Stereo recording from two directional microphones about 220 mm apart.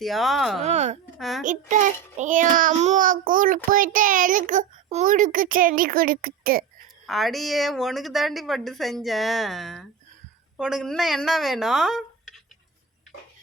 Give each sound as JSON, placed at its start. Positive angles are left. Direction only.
{"t": 0.0, "sound": "a woman's voice", "side_deg": 0}
{"t": 0.6, "sound": "a child's voice", "side_deg": -30}
{"t": 1.2, "sound": "a woman's voice", "side_deg": 0}
{"t": 1.5, "sound": "a child's voice", "side_deg": -35}
{"t": 7.1, "sound": "a woman's voice", "side_deg": 0}